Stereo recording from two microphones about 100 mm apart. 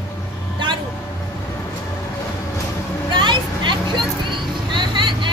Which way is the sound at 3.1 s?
50° right (ahead or behind).